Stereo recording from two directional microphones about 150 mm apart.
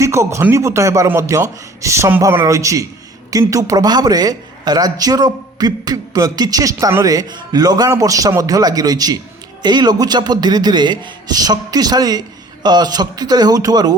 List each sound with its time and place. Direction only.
0.0 s a man's voice: 20° right (ahead or behind)